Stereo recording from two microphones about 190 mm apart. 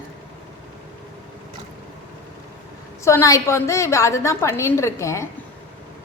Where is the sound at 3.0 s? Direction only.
15° left (ahead or behind).